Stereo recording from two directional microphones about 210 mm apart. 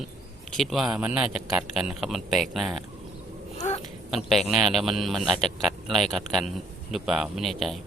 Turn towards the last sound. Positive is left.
turn(degrees=0)  # may be behind; listen again after turning